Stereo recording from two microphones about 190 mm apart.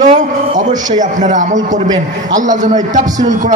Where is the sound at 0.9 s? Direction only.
40° right (ahead or behind).